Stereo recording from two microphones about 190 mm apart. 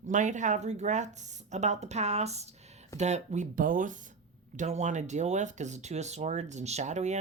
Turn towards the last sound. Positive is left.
turn(degrees=-40)  # may be behind; listen again after turning